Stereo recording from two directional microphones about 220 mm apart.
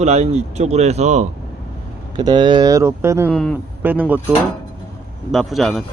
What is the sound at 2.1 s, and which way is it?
Speech, 20° right (ahead or behind).